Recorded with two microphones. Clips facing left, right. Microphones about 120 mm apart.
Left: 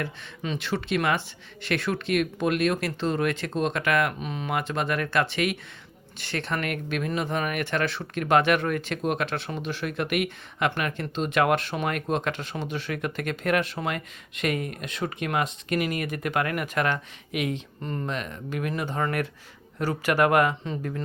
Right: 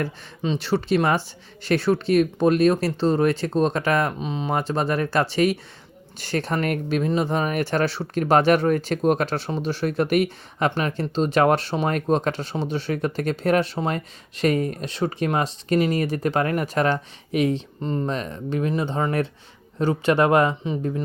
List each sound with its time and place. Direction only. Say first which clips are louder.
0.4 s speech: right 6 dB; 30° right (ahead or behind)
17.7 s speech: right 6 dB; 20° right (ahead or behind)